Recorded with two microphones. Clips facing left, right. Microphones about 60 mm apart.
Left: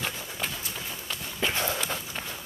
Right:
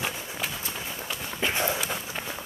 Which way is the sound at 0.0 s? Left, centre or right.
Centre.